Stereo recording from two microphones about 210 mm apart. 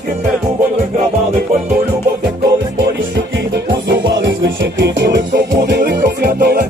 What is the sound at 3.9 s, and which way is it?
Music, 55° right (ahead or behind).